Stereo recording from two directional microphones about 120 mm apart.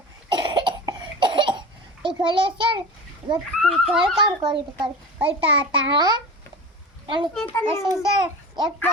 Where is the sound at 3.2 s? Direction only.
40° right (ahead or behind).